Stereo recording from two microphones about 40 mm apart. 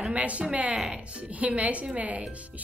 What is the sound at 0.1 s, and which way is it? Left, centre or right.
A woman's voice, right.